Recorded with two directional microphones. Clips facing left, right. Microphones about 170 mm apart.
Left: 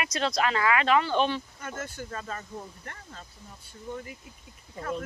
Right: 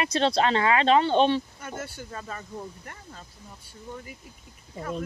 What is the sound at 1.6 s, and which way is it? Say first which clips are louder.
Speech: even; 10° right (ahead or behind).